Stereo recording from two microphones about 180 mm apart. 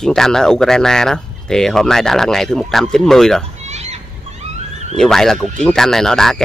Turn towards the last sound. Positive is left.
turn(degrees=5)  # may be behind; listen again after turning